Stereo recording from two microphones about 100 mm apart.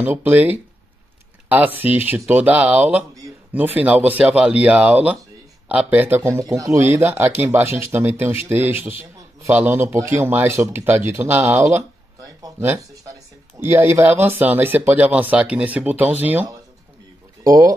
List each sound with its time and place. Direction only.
0.0 s speech: 20° right (ahead or behind); by 12.6 s 40° right (ahead or behind)
13.6 s speech: 25° right (ahead or behind)
17.4 s speech: 35° right (ahead or behind)